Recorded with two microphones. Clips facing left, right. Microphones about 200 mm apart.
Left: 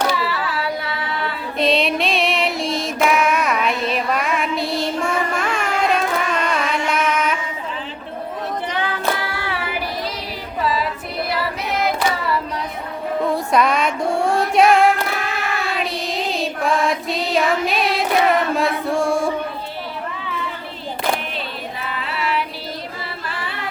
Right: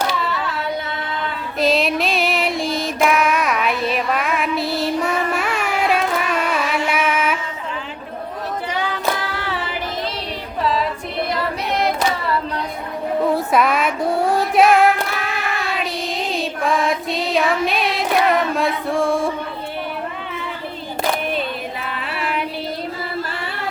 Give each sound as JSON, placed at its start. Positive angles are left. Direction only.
{"t": 0.2, "sound": "singing", "side_deg": 5}
{"t": 1.5, "sound": "female singing", "side_deg": 0}
{"t": 5.0, "sound": "music", "side_deg": -5}
{"t": 9.3, "sound": "child singing", "side_deg": 10}
{"t": 10.6, "sound": "female singing", "side_deg": 5}
{"t": 13.2, "sound": "music", "side_deg": -5}
{"t": 15.8, "sound": "child singing", "side_deg": 0}